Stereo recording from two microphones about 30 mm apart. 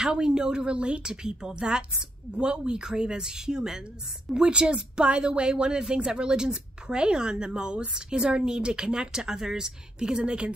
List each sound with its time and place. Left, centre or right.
0.0 s a woman's voice: right
1.2 s a woman's voice: right